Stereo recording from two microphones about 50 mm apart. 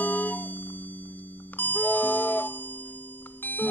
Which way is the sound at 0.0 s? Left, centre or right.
Left.